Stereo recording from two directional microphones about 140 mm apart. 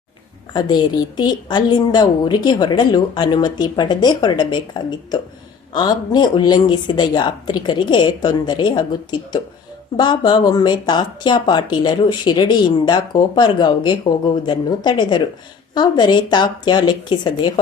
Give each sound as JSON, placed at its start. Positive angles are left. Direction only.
{"t": 0.5, "sound": "speech", "side_deg": 30}